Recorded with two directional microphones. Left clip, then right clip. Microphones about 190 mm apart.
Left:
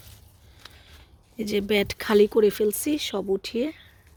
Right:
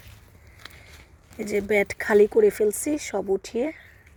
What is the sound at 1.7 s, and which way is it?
Speech, 25° left (ahead or behind).